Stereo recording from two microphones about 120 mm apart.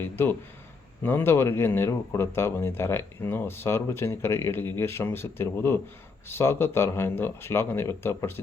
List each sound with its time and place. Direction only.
0.0 s speech: 20° left (ahead or behind)